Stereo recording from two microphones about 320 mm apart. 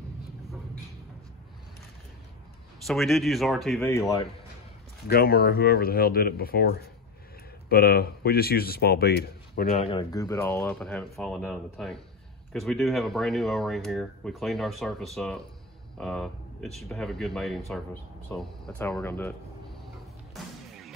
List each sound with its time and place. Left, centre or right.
2.8 s speech: centre
5.0 s speech: left
9.6 s speech: centre